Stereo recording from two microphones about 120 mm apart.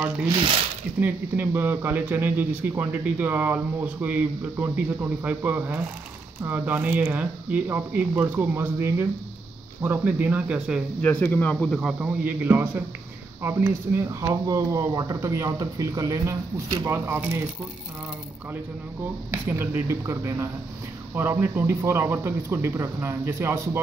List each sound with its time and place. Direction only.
1.0 s speech: 15° right (ahead or behind)
11.0 s a man's voice: 15° left (ahead or behind)
12.0 s speech: 15° right (ahead or behind)
19.3 s speech: 20° right (ahead or behind)